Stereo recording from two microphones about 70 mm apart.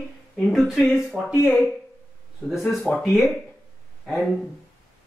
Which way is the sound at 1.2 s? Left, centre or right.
Right.